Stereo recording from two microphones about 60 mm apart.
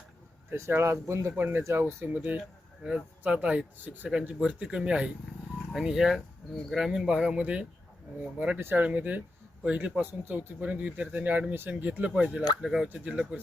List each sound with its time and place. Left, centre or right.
0.8 s speech: right
1.4 s speech: right
2.0 s speech: right
8.5 s speech: right
10.0 s speech: right
12.6 s speech: centre